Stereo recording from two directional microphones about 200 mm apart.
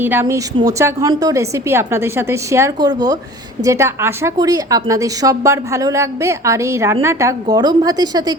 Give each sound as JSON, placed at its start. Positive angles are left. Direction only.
{"t": 0.0, "sound": "a woman's voice", "side_deg": -10}